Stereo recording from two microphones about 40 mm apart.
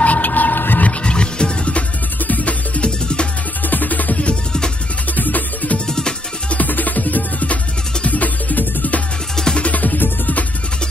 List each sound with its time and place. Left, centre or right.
0.0 s music: left
1.0 s music: left
2.1 s music: left
3.6 s music: left
5.9 s music: centre
6.5 s music: left